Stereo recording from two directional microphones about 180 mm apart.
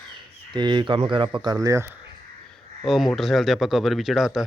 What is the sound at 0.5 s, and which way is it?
Speech, 25° right (ahead or behind).